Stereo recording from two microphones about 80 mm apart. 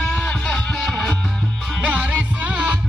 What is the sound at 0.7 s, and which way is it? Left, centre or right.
Music, centre.